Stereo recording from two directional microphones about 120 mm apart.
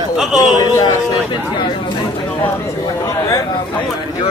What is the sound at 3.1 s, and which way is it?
Speech, 30° left (ahead or behind).